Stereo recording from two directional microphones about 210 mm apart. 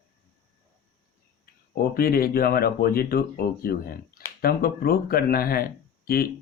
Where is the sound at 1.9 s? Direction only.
45° left (ahead or behind).